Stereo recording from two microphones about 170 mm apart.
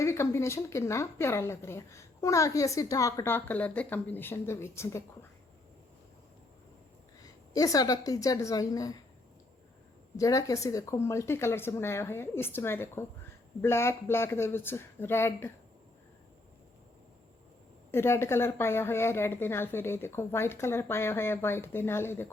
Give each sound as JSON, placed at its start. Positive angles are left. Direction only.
{"t": 0.0, "sound": "a woman's voice", "side_deg": 15}
{"t": 7.5, "sound": "a woman's voice", "side_deg": 20}
{"t": 10.2, "sound": "a woman's voice", "side_deg": 20}
{"t": 17.9, "sound": "a woman's voice", "side_deg": 15}